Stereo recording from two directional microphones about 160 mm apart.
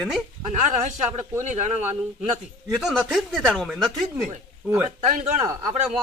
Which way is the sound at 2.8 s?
Centre (ahead or behind).